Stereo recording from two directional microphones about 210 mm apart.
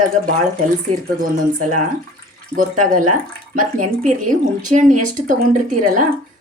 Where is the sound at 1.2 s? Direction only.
40° right (ahead or behind).